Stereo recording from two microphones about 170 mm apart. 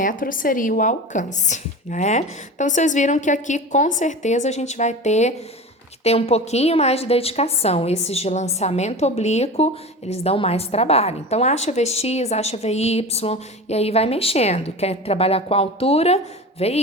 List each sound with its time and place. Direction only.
0.0 s a woman's voice: 50° left (ahead or behind)